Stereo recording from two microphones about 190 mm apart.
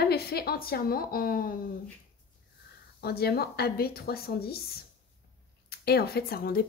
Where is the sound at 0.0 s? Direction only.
55° left (ahead or behind).